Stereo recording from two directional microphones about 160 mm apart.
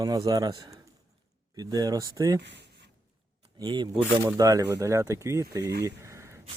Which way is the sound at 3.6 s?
30° right (ahead or behind).